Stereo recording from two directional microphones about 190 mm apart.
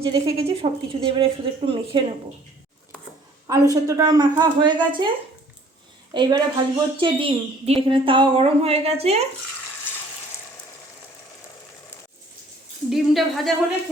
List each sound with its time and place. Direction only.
0.0 s a woman's voice: 30° right (ahead or behind)
3.4 s a woman's voice: 15° right (ahead or behind)
6.1 s a woman's voice: 25° right (ahead or behind)
12.9 s speech: centre (ahead or behind)